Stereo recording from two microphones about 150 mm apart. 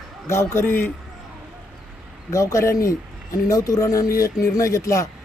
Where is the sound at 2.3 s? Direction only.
20° left (ahead or behind).